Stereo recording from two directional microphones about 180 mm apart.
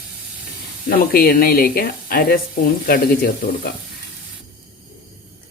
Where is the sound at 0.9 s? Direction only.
55° left (ahead or behind).